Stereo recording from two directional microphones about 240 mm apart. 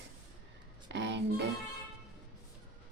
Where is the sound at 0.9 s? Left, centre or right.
Right.